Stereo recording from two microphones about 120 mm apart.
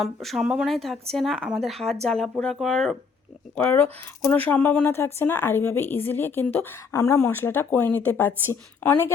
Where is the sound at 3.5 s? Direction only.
20° left (ahead or behind).